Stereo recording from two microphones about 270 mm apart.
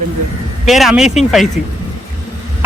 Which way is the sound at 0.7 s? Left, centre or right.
Centre.